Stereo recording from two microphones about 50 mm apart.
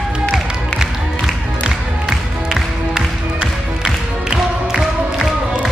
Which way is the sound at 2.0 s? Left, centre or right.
Centre.